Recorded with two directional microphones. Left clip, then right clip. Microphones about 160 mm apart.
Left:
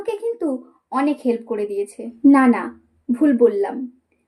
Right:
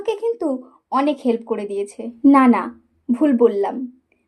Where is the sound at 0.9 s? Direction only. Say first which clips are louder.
Right 2 dB; 20° right (ahead or behind).